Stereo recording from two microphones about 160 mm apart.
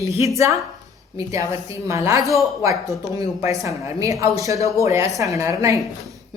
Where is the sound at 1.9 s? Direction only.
20° right (ahead or behind).